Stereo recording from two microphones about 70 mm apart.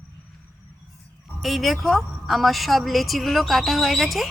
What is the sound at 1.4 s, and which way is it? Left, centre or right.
A woman's voice, centre.